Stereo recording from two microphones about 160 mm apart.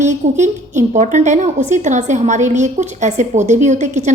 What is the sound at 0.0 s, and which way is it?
A woman's voice, 45° right (ahead or behind).